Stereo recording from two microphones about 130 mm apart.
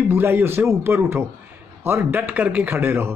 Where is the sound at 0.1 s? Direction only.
15° right (ahead or behind).